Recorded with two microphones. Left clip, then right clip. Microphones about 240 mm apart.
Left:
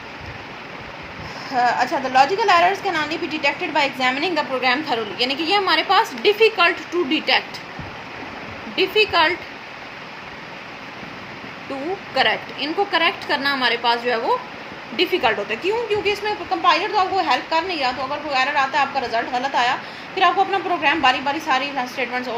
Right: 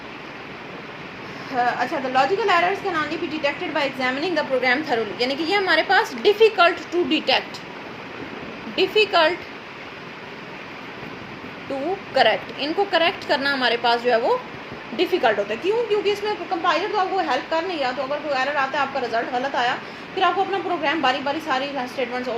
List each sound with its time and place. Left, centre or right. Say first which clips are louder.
1.5 s a woman's voice: left 3 dB; left
8.7 s a woman's voice: left 1 dB; left
12.1 s a woman's voice: right 1 dB; left